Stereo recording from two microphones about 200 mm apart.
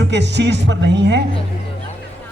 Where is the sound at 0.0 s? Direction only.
60° right (ahead or behind).